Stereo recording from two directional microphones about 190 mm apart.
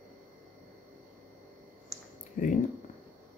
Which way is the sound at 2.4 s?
45° left (ahead or behind).